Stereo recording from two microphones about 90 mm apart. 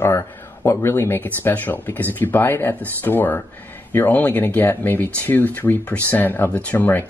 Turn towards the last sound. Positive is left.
turn(degrees=20)  # may be behind; listen again after turning